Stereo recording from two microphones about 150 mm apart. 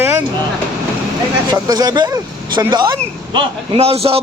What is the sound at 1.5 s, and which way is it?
A man's voice, 25° right (ahead or behind).